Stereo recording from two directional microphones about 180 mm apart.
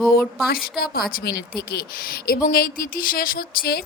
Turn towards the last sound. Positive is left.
turn(degrees=60)  # may be behind; listen again after turning